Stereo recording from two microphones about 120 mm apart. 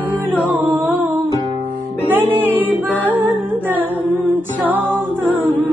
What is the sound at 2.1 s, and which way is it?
Music, 15° right (ahead or behind).